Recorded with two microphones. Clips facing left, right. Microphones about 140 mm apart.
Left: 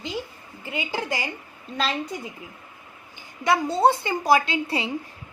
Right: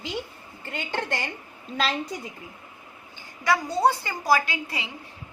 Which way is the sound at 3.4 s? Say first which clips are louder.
Left 3 dB; 25° left (ahead or behind).